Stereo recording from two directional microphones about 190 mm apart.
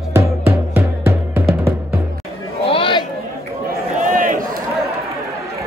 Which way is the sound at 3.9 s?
45° right (ahead or behind).